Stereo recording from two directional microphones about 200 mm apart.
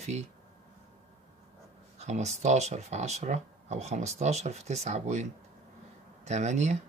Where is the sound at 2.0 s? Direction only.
35° right (ahead or behind).